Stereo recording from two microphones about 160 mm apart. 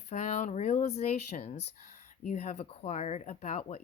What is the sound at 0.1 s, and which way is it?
A woman's voice, 45° left (ahead or behind).